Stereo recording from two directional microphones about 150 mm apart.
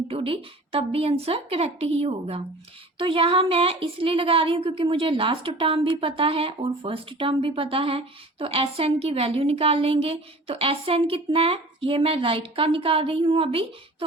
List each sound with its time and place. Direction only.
0.1 s speech: 40° right (ahead or behind)